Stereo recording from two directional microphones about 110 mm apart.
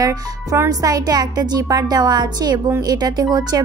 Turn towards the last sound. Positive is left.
turn(degrees=-35)  # may be behind; listen again after turning